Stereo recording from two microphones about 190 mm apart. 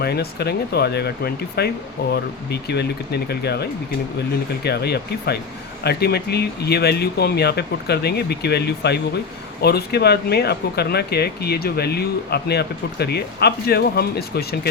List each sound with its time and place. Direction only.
0.0 s speech: 60° left (ahead or behind)